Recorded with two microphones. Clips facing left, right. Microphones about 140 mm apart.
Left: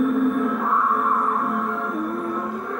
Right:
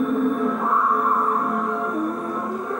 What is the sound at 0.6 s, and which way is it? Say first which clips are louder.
Music: right 1 dB; 15° right (ahead or behind).